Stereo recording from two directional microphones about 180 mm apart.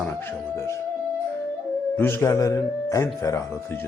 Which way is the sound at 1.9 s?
15° left (ahead or behind).